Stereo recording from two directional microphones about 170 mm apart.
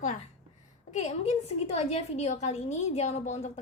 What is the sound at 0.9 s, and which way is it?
A woman's voice, 40° left (ahead or behind).